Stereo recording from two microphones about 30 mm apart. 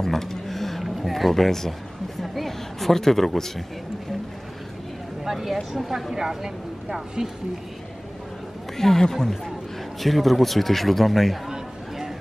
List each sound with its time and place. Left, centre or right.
0.0 s a sound: centre
0.8 s speech: centre
5.2 s speech: centre
8.7 s a woman's voice: centre
11.4 s chatter: centre